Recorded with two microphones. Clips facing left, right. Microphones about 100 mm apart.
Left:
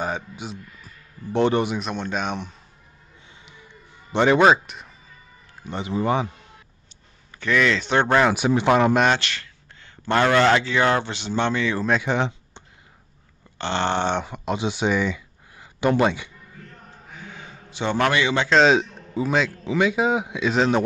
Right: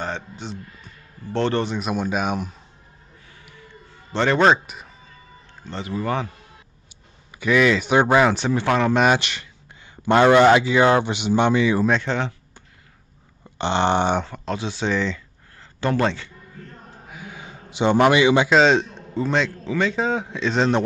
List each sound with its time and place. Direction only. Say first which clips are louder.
0.0 s a man's voice: left 1 dB; 10° left (ahead or behind)
1.8 s speech: right 3 dB; 5° right (ahead or behind)
3.4 s a sound: right 4 dB; 20° left (ahead or behind)
5.6 s a man's voice: left 2 dB; 15° left (ahead or behind)
7.3 s speech: right 3 dB; 10° right (ahead or behind)
8.3 s a man's voice: left 2 dB; 10° left (ahead or behind)
8.9 s speech: right 1 dB; 5° right (ahead or behind)
9.2 s speech: left 1 dB; 15° right (ahead or behind)
12.0 s a sound: left 2 dB; 15° left (ahead or behind)
13.6 s speech: right 4 dB; 15° right (ahead or behind)
14.2 s a man's voice: left 2 dB; 15° left (ahead or behind)
17.1 s a sound: right 2 dB; 10° right (ahead or behind)
18.6 s a man's voice: even; 5° left (ahead or behind)